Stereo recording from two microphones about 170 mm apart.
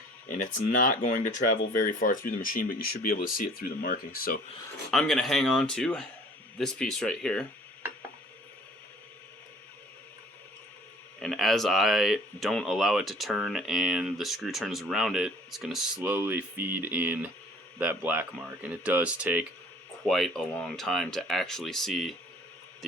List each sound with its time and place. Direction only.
0.3 s speech: 50° left (ahead or behind)
4.9 s speech: 5° left (ahead or behind)
11.2 s speech: centre (ahead or behind)